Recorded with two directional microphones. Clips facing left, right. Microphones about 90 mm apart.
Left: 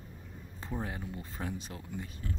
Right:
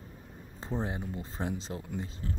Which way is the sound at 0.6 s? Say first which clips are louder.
Right 4 dB; 25° right (ahead or behind).